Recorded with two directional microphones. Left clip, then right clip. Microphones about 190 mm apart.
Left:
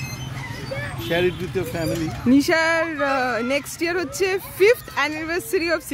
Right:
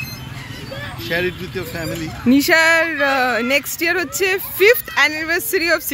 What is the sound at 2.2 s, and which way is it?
Speech, 5° right (ahead or behind).